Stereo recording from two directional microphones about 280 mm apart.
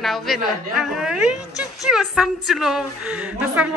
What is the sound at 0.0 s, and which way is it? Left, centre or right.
A woman's voice, centre.